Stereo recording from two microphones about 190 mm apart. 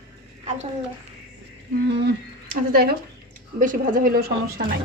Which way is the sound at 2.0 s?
50° right (ahead or behind).